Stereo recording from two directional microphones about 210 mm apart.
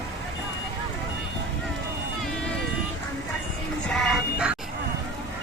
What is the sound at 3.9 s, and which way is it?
Music, centre (ahead or behind).